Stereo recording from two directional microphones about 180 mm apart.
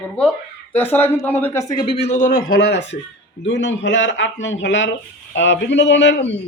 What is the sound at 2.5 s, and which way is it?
Speech, 60° left (ahead or behind).